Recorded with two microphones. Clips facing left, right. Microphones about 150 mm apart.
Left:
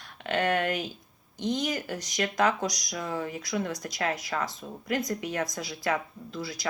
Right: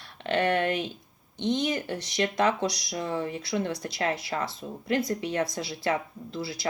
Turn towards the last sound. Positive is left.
turn(degrees=-30)  # may be behind; listen again after turning